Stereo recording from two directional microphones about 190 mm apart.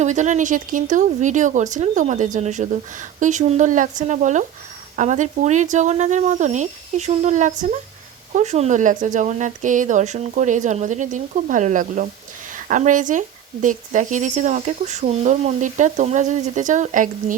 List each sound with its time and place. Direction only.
0.0 s speech: 40° right (ahead or behind)